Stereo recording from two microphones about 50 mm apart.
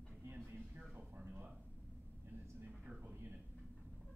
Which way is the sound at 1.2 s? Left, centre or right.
Right.